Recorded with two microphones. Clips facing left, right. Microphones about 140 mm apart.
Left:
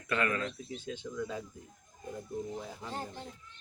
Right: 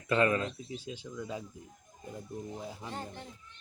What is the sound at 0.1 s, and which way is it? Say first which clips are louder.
Speech: right 4 dB; 25° right (ahead or behind).